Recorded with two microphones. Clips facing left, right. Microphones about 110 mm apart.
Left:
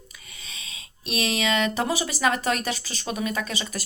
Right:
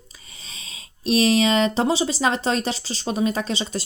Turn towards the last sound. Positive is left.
turn(degrees=-25)  # may be behind; listen again after turning